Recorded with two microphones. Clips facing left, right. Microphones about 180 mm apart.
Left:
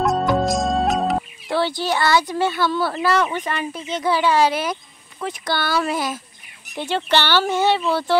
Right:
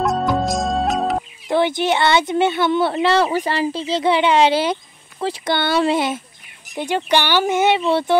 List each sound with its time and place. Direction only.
0.0 s music: centre (ahead or behind)
1.5 s speech: 20° right (ahead or behind)
6.7 s speech: 15° right (ahead or behind)